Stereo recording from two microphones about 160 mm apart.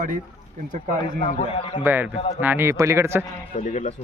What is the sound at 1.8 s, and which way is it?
Speech, 10° right (ahead or behind).